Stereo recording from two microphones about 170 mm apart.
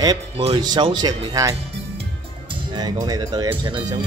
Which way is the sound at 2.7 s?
25° right (ahead or behind).